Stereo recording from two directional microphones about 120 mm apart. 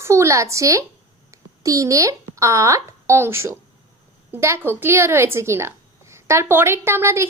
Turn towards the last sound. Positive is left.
turn(degrees=-20)  # may be behind; listen again after turning